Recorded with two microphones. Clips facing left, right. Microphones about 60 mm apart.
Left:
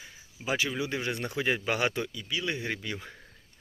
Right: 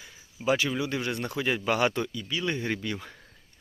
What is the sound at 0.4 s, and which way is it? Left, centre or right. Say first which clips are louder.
Speech: right 4 dB; centre.